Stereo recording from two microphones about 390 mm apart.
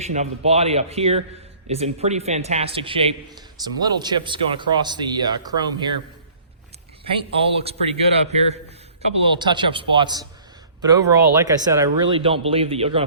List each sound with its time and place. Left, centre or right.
0.0 s speech: centre
7.6 s speech: centre